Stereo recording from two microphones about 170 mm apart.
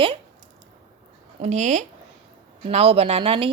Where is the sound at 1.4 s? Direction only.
45° right (ahead or behind).